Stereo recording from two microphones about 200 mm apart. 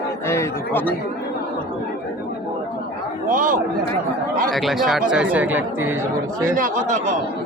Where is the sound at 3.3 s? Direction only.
40° right (ahead or behind).